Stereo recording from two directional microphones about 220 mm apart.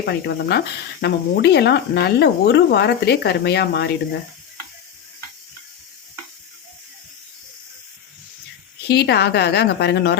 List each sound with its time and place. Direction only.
0.0 s speech: 45° left (ahead or behind)
8.9 s speech: 50° left (ahead or behind)